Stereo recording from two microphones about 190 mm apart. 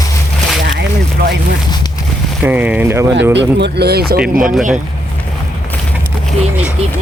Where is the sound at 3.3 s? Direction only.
60° right (ahead or behind).